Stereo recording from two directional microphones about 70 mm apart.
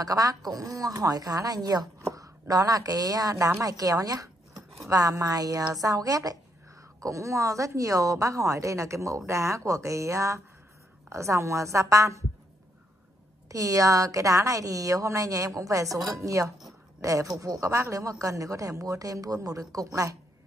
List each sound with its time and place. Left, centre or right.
0.0 s speech: right
2.0 s speech: right
13.5 s speech: right
16.6 s a sound: right
17.4 s speech: right